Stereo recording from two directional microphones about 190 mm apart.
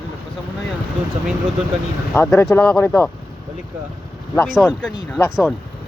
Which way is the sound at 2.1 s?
15° left (ahead or behind).